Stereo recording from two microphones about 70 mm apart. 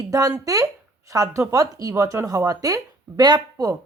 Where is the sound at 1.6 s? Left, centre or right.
Right.